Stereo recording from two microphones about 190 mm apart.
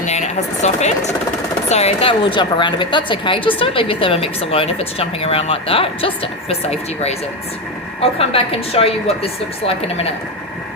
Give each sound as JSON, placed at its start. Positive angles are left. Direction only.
{"t": 0.0, "sound": "a woman's voice", "side_deg": 35}